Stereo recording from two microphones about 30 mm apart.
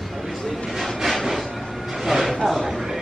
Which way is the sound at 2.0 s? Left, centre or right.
Centre.